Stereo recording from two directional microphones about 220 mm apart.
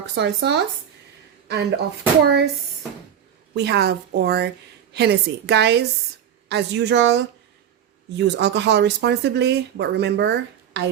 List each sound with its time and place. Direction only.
0.2 s speech: 50° right (ahead or behind)
3.5 s speech: 50° right (ahead or behind)